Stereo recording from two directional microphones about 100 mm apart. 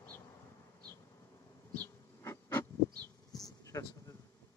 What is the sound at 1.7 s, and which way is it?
Bee, 20° left (ahead or behind).